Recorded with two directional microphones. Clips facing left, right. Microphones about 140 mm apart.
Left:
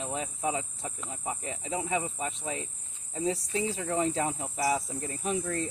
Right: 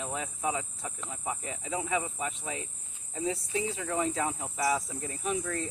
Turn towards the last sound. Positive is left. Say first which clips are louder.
# left 1 dB
turn(degrees=35)  # may be behind; listen again after turning